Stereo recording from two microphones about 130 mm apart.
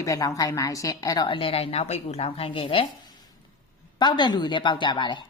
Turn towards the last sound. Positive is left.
turn(degrees=35)  # may be behind; listen again after turning